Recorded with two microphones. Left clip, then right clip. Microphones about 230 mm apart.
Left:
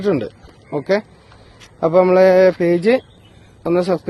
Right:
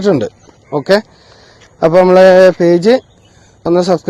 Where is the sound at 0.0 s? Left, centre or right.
Right.